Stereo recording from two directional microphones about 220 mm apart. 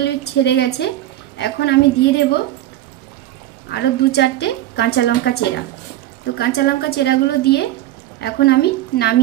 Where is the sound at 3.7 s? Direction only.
45° left (ahead or behind).